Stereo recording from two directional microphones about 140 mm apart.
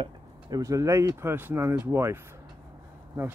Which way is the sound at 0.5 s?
25° right (ahead or behind).